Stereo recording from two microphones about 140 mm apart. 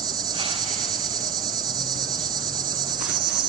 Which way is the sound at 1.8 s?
30° right (ahead or behind).